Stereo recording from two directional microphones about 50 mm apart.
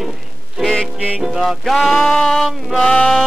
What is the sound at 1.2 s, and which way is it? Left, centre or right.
Music, centre.